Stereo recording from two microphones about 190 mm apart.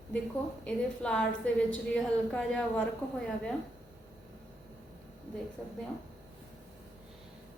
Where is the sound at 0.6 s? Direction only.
5° left (ahead or behind).